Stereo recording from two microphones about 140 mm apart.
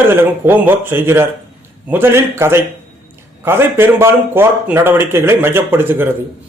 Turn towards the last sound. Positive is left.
turn(degrees=-15)  # may be behind; listen again after turning